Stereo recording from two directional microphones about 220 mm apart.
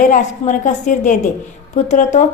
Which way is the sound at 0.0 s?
35° left (ahead or behind).